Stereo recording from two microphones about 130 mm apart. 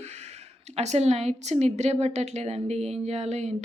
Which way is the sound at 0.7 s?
55° right (ahead or behind).